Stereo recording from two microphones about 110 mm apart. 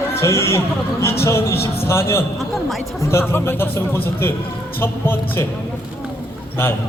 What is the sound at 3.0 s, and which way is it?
A man's voice, 25° left (ahead or behind).